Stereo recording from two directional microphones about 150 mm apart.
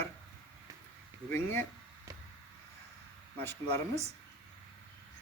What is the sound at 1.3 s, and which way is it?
Speech, 15° left (ahead or behind).